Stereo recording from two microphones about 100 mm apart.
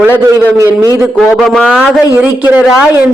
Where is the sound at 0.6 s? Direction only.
30° right (ahead or behind).